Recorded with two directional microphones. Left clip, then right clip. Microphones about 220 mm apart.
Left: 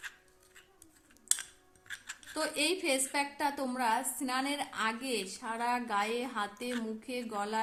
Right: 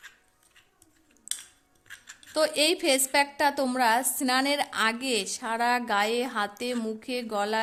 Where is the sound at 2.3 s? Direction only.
40° right (ahead or behind).